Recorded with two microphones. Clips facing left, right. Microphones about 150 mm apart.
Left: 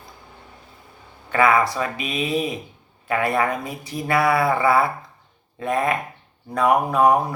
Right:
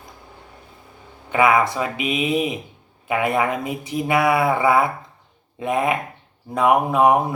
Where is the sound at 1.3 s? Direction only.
20° right (ahead or behind).